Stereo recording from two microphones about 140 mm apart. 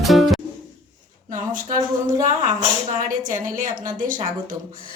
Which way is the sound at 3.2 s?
70° right (ahead or behind).